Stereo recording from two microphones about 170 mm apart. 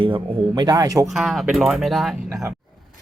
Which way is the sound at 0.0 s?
30° right (ahead or behind).